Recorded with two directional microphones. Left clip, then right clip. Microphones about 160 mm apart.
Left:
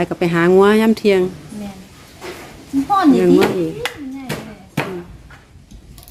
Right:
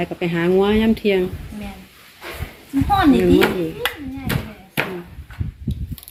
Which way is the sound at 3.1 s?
10° left (ahead or behind).